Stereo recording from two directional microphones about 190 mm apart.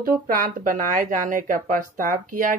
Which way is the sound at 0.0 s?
45° right (ahead or behind).